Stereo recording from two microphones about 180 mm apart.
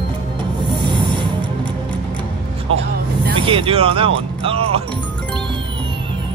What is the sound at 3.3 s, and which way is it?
Speech, 30° right (ahead or behind).